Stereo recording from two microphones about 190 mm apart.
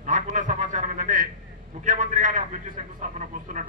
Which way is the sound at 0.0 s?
40° right (ahead or behind).